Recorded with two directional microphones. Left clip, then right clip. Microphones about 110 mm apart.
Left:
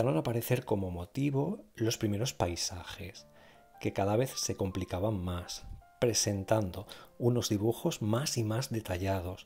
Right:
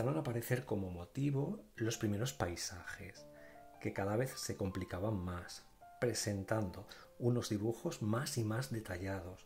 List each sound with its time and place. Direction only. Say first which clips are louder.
0.0 s speech: left 8 dB; 40° left (ahead or behind)
8.1 s speech: left 6 dB; 35° left (ahead or behind)